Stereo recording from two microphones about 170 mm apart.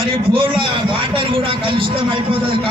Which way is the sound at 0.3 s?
30° right (ahead or behind).